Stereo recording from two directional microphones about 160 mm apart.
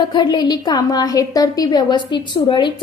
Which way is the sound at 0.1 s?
25° left (ahead or behind).